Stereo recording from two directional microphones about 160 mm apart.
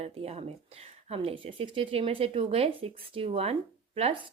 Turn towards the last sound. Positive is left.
turn(degrees=-40)  # may be behind; listen again after turning